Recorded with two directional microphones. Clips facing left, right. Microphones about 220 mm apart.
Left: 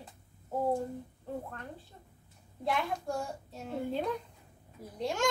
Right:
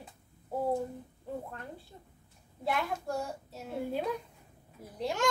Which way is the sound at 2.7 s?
5° right (ahead or behind).